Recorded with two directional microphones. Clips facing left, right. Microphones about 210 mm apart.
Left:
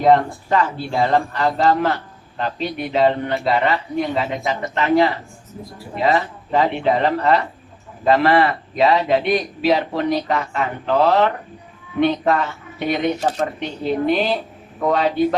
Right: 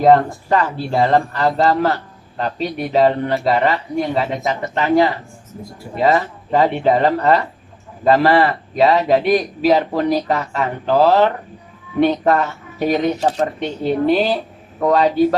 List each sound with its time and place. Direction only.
0.0 s a man's voice: 40° right (ahead or behind)